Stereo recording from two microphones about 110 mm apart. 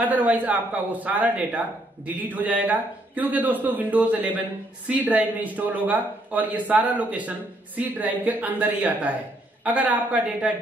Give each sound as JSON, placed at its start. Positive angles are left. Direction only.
{"t": 0.0, "sound": "a man's voice", "side_deg": -15}